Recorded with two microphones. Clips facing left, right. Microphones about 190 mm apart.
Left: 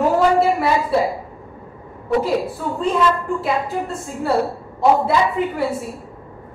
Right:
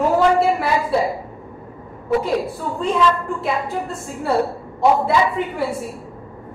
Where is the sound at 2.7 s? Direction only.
Centre (ahead or behind).